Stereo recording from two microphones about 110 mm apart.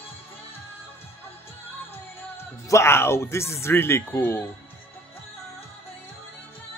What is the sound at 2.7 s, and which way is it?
A man's voice, 25° left (ahead or behind).